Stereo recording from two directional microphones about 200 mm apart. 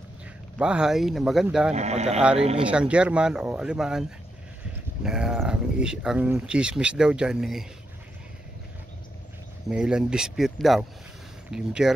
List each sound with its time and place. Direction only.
0.6 s speech: 5° right (ahead or behind)
1.7 s speech: 35° right (ahead or behind)
2.7 s speech: 5° right (ahead or behind)
9.7 s speech: 5° right (ahead or behind)